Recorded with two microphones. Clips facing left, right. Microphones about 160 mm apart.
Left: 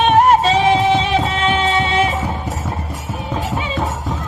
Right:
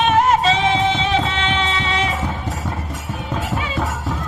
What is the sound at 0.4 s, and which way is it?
Music, 35° left (ahead or behind).